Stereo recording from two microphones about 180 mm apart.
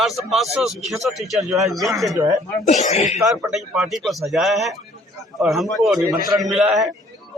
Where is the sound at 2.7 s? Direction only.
40° left (ahead or behind).